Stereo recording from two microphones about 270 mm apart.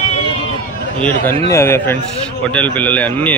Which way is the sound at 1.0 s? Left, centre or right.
Centre.